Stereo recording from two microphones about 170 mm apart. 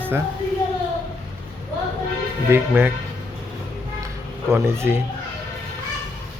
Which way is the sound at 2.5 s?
10° right (ahead or behind).